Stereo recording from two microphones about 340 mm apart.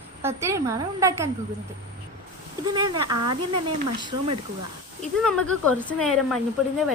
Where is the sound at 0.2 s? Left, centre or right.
Centre.